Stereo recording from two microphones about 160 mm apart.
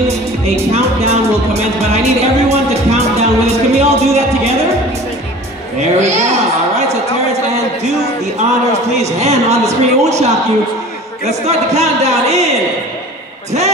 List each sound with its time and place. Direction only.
0.7 s music: 40° right (ahead or behind)
5.8 s speech: 45° right (ahead or behind)
8.9 s speech: 45° right (ahead or behind)